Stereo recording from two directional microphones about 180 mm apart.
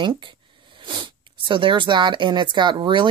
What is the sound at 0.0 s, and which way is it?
Speech, 25° right (ahead or behind).